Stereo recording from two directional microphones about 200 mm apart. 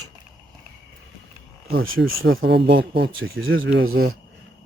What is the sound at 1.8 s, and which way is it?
Speech, 85° right.